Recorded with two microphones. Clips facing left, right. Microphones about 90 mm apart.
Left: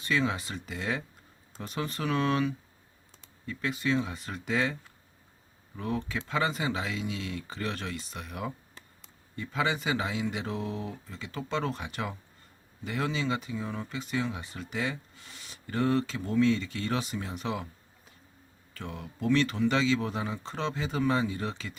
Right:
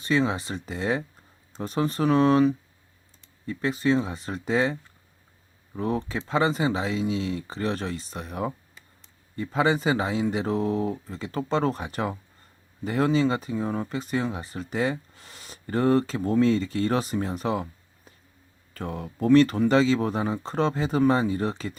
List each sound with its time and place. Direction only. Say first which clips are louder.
0.0 s speech: right 5 dB; 30° right (ahead or behind)
18.7 s speech: right 7 dB; 40° right (ahead or behind)